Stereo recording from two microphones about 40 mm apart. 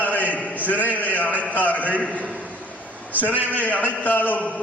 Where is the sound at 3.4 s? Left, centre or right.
Left.